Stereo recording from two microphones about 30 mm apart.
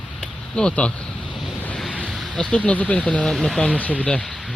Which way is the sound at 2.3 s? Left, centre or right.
Left.